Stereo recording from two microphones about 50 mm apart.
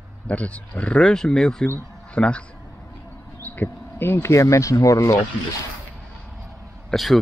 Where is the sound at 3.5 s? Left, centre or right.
Left.